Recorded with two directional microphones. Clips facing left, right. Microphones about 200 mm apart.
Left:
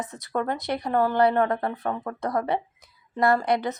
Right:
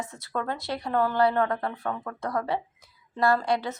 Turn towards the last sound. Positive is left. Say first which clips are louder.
# left 2 dB
turn(degrees=20)  # may be behind; listen again after turning